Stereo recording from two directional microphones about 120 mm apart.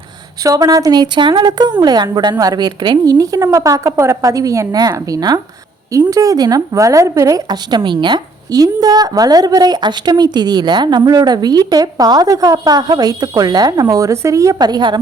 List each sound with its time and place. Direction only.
0.4 s a woman's voice: 30° right (ahead or behind)